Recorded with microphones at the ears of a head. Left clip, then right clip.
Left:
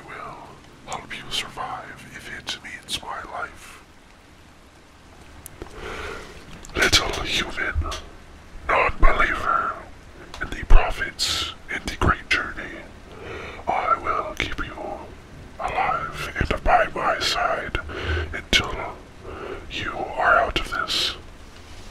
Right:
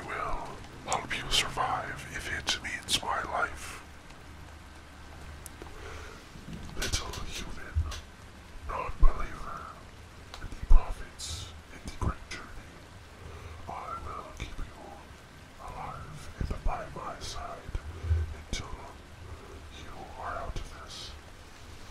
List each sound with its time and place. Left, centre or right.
0.0 s whispering: centre
5.6 s sniff: left
6.7 s a sound: left
10.3 s whispering: left